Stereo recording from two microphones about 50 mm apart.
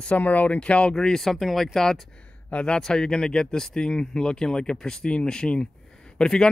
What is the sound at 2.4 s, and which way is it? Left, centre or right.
Speech, left.